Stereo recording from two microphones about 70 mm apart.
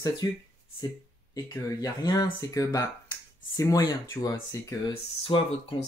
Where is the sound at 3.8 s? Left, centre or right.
Left.